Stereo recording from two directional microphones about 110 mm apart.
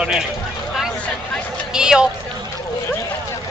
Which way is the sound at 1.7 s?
5° right (ahead or behind).